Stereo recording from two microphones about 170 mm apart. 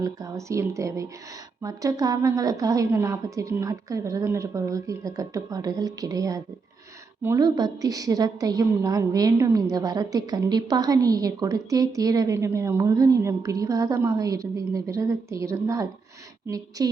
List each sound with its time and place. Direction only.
0.0 s a woman's voice: 20° right (ahead or behind)